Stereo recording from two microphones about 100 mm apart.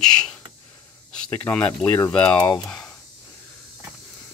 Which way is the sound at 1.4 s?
15° left (ahead or behind).